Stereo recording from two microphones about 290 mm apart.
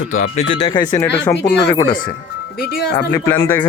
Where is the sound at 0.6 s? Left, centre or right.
Centre.